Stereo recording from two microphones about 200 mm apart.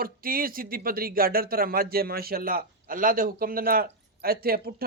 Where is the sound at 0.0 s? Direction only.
45° right (ahead or behind).